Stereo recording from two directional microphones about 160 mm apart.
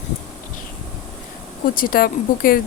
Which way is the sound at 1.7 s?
60° left (ahead or behind).